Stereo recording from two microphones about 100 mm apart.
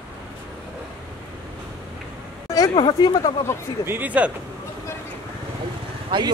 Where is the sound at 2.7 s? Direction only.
50° left (ahead or behind).